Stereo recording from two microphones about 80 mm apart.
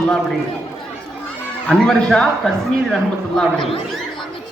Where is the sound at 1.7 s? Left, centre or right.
Centre.